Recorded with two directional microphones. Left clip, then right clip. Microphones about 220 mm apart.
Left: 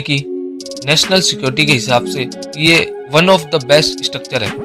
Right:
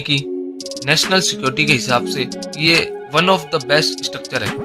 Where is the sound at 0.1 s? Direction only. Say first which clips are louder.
Left 1 dB; 5° left (ahead or behind).